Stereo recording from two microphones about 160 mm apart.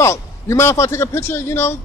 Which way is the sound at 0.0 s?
15° left (ahead or behind).